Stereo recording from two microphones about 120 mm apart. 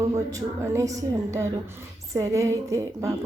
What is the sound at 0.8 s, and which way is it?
A woman's voice, 25° right (ahead or behind).